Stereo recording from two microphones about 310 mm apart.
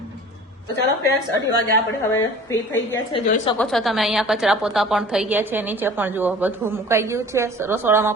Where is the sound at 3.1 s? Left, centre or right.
Left.